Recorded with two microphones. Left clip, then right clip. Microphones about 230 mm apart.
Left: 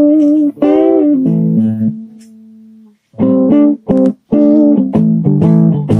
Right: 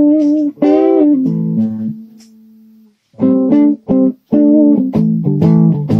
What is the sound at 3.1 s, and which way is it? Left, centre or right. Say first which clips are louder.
Music: left 2 dB; left.